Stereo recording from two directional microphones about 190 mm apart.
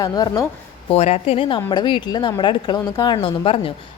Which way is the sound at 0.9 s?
35° left (ahead or behind).